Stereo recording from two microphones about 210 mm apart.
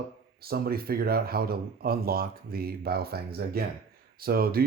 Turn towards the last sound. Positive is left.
turn(degrees=-45)  # may be behind; listen again after turning